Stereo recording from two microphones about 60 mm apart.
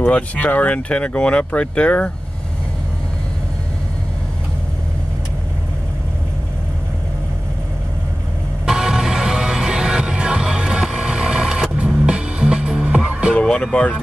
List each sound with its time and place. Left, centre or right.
0.1 s speech: left
8.6 s music: centre
13.4 s music: centre